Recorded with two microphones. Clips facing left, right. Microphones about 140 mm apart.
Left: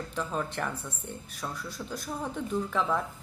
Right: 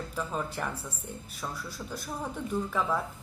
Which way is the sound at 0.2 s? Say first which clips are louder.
Left 1 dB; 5° right (ahead or behind).